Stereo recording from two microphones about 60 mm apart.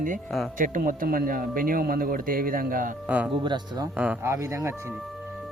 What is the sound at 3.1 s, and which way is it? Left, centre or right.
Speech, right.